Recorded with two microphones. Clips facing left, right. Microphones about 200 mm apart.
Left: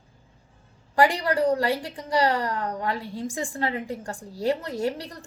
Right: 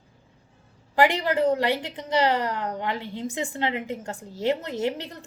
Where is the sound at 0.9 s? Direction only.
20° right (ahead or behind).